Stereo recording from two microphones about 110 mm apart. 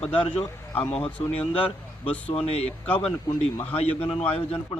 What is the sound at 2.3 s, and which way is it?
Speech, 65° left (ahead or behind).